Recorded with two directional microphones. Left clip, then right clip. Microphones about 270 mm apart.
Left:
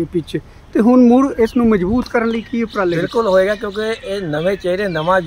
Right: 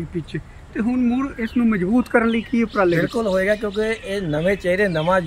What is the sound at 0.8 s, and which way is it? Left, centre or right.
Speech, left.